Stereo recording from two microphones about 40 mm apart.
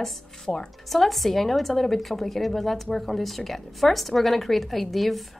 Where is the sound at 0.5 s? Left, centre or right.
Left.